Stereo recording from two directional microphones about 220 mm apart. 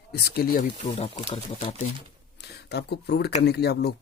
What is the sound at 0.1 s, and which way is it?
Speech, 45° left (ahead or behind).